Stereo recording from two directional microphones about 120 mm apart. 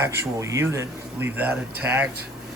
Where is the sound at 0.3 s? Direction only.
25° right (ahead or behind).